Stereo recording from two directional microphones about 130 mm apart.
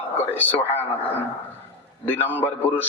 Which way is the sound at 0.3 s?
15° left (ahead or behind).